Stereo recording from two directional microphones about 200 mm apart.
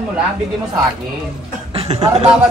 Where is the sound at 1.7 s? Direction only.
30° right (ahead or behind).